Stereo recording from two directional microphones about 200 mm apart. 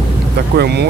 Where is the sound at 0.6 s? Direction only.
55° right (ahead or behind).